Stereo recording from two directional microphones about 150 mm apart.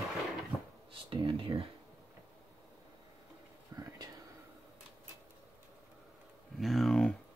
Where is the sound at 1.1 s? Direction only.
35° right (ahead or behind).